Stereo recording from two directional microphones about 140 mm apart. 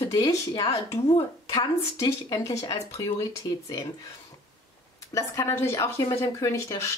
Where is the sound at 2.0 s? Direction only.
25° left (ahead or behind).